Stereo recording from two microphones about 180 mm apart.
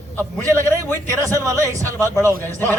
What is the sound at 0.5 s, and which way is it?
A man's voice, 10° left (ahead or behind).